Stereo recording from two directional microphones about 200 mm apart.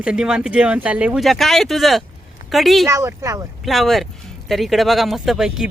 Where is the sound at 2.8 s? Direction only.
15° right (ahead or behind).